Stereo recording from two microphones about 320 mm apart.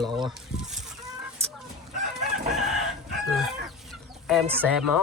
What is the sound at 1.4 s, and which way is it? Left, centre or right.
Chicken, centre.